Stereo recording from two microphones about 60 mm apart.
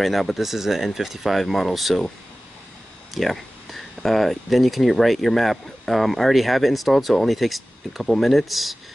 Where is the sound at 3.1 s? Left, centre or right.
Centre.